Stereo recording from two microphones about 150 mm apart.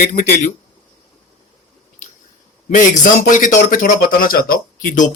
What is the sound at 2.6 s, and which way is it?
A man's voice, 60° left (ahead or behind).